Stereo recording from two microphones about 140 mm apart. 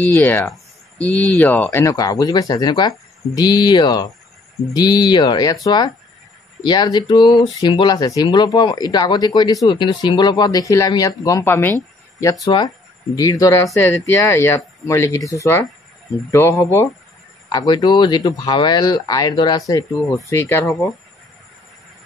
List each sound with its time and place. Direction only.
0.0 s speech: 15° left (ahead or behind)